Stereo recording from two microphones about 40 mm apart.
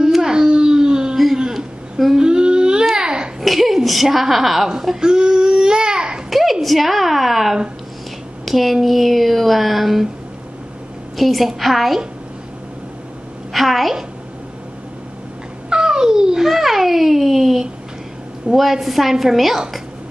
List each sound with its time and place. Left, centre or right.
0.2 s baby cry: centre
1.1 s a sound: centre
2.1 s a sound: right
2.9 s babbling: centre
3.3 s a sound: centre; by 6.2 s right
6.3 s a woman's voice: centre
11.1 s speech: centre
13.5 s a woman's voice: centre
15.7 s babbling: centre
16.4 s a child's voice: centre